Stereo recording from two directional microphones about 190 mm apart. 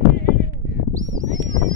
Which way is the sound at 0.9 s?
40° right (ahead or behind).